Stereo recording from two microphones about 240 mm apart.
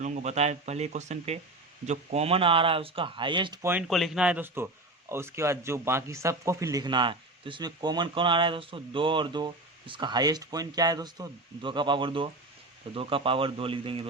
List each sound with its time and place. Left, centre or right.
0.0 s speech: right